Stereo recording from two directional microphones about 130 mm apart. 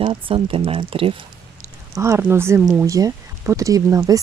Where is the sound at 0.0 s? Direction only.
40° right (ahead or behind).